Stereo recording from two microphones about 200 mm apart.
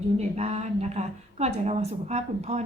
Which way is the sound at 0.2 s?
30° right (ahead or behind).